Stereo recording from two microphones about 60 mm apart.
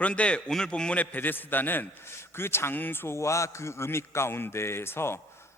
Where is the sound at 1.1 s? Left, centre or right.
Left.